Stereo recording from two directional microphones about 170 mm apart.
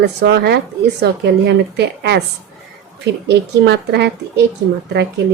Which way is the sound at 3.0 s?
90° right.